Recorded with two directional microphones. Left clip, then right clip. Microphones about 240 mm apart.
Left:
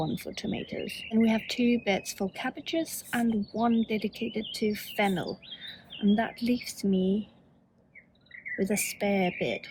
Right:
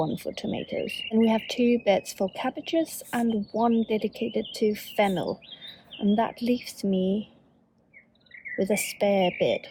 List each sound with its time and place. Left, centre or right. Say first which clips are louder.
0.1 s speech: right 3 dB; centre
8.5 s speech: right 4 dB; centre